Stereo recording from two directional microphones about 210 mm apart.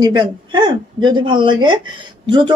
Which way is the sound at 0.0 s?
20° right (ahead or behind).